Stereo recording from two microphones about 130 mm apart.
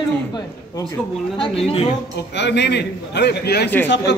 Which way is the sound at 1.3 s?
50° left (ahead or behind).